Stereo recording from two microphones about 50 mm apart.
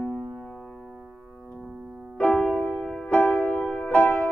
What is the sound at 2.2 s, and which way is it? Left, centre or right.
Music, centre.